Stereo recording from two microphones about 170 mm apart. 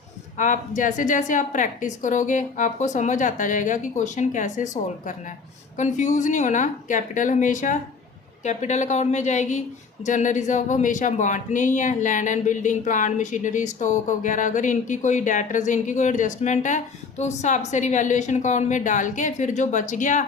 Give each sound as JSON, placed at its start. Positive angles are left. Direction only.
{"t": 0.3, "sound": "speech", "side_deg": 50}